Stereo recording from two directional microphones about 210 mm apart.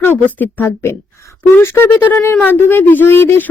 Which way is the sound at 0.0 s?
10° left (ahead or behind).